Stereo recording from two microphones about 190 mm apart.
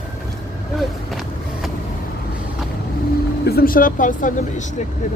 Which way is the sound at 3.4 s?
55° left (ahead or behind).